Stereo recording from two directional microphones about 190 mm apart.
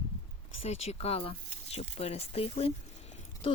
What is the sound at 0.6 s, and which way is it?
Speech, 35° left (ahead or behind).